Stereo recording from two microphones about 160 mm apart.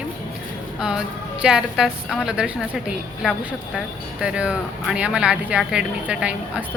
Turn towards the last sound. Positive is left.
turn(degrees=-5)  # may be behind; listen again after turning